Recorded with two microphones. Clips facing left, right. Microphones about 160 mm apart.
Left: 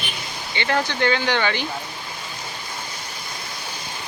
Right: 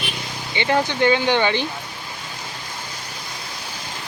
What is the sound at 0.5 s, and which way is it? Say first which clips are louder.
Speech: right 3 dB; 15° right (ahead or behind).